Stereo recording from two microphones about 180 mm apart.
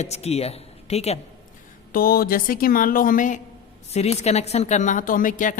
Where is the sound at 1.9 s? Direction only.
55° left (ahead or behind).